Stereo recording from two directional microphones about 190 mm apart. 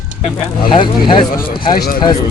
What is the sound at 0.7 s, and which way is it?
Speech, 25° left (ahead or behind).